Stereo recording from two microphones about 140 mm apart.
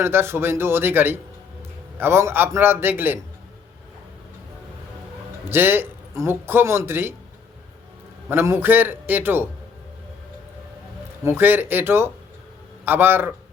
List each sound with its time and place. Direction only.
0.0 s speech: 15° right (ahead or behind)
5.5 s speech: 15° right (ahead or behind)
8.3 s speech: 15° right (ahead or behind)
11.2 s speech: 15° right (ahead or behind)